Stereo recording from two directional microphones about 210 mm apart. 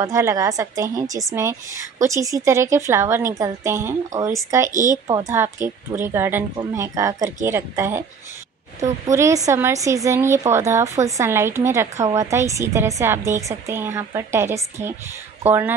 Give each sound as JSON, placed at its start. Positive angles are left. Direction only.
{"t": 0.0, "sound": "a woman's voice", "side_deg": -15}
{"t": 4.6, "sound": "speech", "side_deg": -35}
{"t": 5.0, "sound": "a woman's voice", "side_deg": -15}
{"t": 9.0, "sound": "a woman's voice", "side_deg": -15}